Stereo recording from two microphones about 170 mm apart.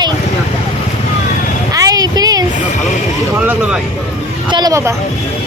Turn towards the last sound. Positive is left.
turn(degrees=-20)  # may be behind; listen again after turning